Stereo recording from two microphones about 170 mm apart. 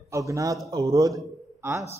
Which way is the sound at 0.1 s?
20° right (ahead or behind).